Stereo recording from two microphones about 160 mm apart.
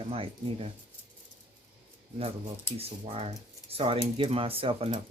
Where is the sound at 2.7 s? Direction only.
40° right (ahead or behind).